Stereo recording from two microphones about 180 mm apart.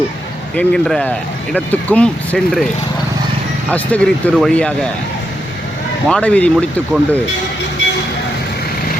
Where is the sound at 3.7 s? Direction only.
10° left (ahead or behind).